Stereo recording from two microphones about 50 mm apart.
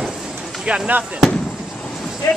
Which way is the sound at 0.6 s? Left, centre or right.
Right.